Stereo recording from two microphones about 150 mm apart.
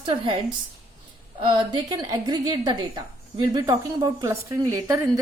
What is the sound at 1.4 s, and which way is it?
A woman's voice, 35° right (ahead or behind).